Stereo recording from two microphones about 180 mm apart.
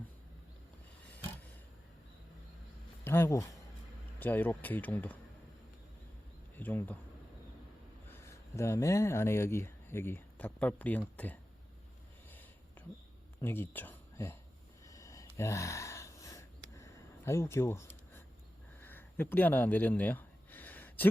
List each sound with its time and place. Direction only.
3.0 s speech: 10° left (ahead or behind)
6.6 s speech: 10° left (ahead or behind)
8.1 s speech: 15° left (ahead or behind)
13.4 s speech: 10° left (ahead or behind)
14.8 s a sound: 15° left (ahead or behind)